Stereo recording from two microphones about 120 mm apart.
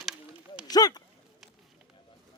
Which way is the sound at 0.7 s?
35° left (ahead or behind).